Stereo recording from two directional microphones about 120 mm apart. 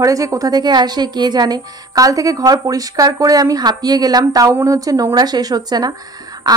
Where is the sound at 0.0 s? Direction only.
30° right (ahead or behind).